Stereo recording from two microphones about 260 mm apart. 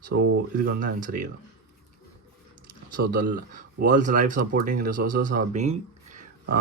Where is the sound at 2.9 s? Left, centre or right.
Right.